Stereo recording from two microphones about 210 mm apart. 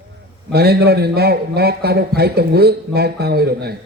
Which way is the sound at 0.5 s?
50° right (ahead or behind).